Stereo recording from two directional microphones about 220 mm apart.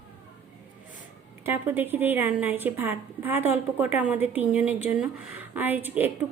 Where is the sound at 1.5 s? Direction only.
10° right (ahead or behind).